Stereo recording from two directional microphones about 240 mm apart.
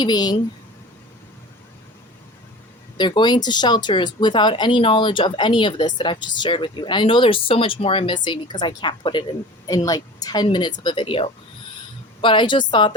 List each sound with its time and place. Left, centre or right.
0.0 s speech: centre
3.0 s speech: centre